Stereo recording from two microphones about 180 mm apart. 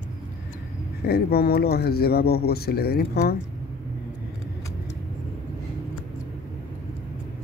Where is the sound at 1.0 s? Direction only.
60° left (ahead or behind).